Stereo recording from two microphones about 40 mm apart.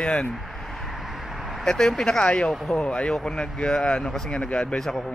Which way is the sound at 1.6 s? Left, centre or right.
Centre.